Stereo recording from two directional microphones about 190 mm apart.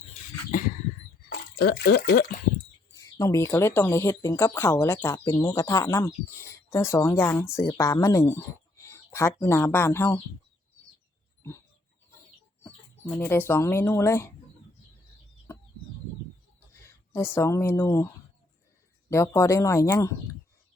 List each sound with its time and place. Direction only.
1.3 s a sound: 55° left (ahead or behind)
1.8 s speech: 55° left (ahead or behind)
2.9 s speech: 15° left (ahead or behind)
12.6 s speech: 10° left (ahead or behind)
16.8 s speech: 15° left (ahead or behind)
19.1 s speech: 15° left (ahead or behind)